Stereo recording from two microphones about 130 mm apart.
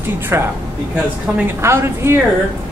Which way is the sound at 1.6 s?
20° right (ahead or behind).